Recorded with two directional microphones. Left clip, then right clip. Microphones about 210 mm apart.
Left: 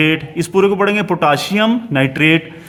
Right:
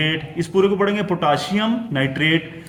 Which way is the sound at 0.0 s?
45° left (ahead or behind).